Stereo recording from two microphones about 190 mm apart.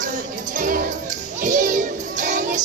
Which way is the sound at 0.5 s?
45° right (ahead or behind).